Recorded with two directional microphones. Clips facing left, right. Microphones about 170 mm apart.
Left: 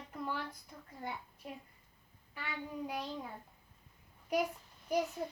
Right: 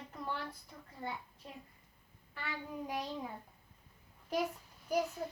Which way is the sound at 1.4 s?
15° left (ahead or behind).